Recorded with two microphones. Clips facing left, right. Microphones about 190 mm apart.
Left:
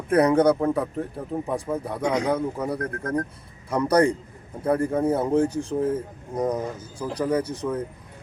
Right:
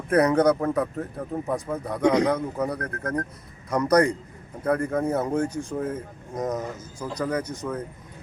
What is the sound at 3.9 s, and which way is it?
Speech, 30° left (ahead or behind).